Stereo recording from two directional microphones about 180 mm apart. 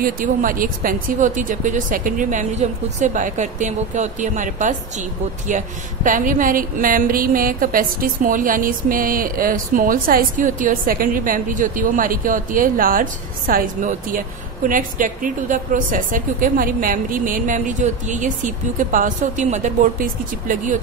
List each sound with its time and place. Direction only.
0.0 s a woman's voice: 50° right (ahead or behind)